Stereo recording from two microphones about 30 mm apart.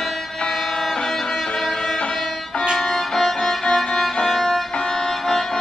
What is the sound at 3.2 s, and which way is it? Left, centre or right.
Music, centre.